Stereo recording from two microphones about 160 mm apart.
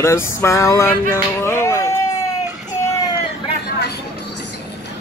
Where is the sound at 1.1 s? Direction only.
15° left (ahead or behind).